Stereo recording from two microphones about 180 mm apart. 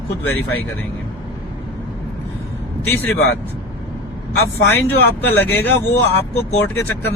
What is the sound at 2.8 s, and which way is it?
Speech, 10° left (ahead or behind).